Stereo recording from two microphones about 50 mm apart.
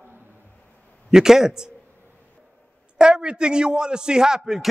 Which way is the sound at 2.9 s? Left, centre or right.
Centre.